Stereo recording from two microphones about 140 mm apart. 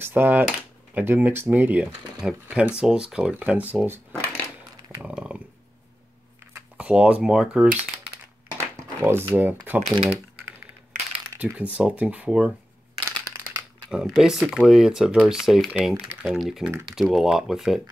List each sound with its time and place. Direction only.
0.0 s speech: 15° right (ahead or behind)
5.0 s dog: 10° right (ahead or behind)
6.8 s speech: 10° right (ahead or behind)
8.5 s typing: 20° right (ahead or behind)
11.5 s speech: 10° right (ahead or behind)
13.8 s speech: centre (ahead or behind)